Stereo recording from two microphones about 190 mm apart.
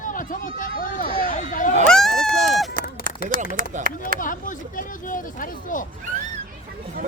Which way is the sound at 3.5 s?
45° right (ahead or behind).